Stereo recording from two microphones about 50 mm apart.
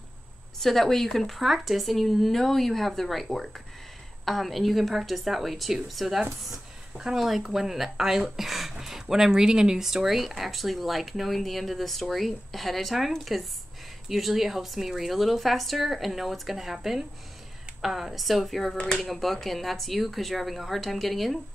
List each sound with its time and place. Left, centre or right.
0.6 s speech: centre